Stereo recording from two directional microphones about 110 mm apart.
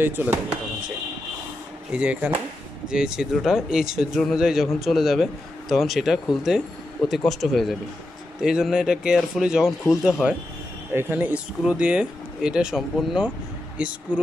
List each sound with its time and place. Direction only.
0.0 s speech: 20° right (ahead or behind)
1.9 s a man's voice: 10° right (ahead or behind)
10.9 s speech: 20° right (ahead or behind)